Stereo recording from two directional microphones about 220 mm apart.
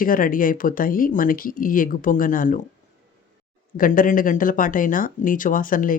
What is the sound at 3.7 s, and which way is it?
Speech, 40° left (ahead or behind).